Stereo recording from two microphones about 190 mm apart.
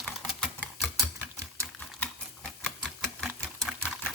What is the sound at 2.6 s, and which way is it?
Typewriter, 5° left (ahead or behind).